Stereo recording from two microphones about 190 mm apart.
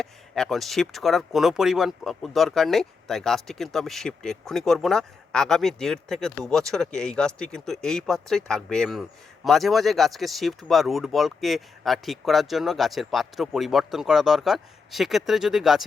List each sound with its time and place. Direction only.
0.0 s speech: 5° left (ahead or behind)